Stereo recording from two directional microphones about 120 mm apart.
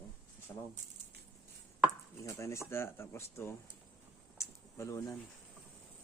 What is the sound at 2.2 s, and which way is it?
Speech, 25° left (ahead or behind).